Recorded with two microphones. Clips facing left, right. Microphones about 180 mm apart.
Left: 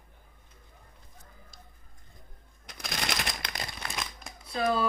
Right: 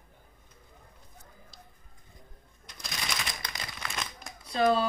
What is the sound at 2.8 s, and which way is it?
Typewriter, 65° left (ahead or behind).